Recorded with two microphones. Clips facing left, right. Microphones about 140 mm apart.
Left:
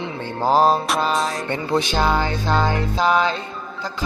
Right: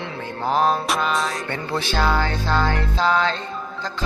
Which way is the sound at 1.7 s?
20° left (ahead or behind).